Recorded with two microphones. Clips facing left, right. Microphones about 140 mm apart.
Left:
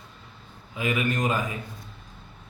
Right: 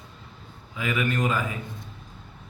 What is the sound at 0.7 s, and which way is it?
Speech, 20° left (ahead or behind).